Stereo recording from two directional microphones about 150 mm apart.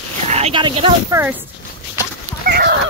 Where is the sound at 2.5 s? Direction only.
90° right.